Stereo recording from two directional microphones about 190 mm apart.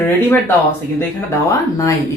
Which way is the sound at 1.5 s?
15° left (ahead or behind).